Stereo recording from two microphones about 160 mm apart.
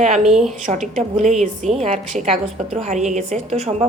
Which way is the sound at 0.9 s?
50° right (ahead or behind).